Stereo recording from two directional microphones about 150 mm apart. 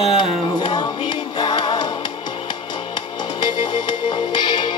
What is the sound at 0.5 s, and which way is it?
Music, 30° left (ahead or behind).